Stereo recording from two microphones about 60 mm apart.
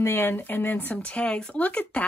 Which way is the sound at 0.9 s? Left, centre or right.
Centre.